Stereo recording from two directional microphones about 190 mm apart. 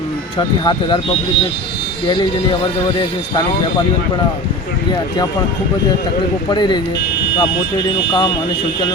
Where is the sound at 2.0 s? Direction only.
25° left (ahead or behind).